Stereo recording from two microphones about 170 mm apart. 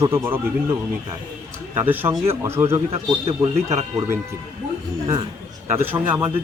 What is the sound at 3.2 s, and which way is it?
Speech, 40° right (ahead or behind).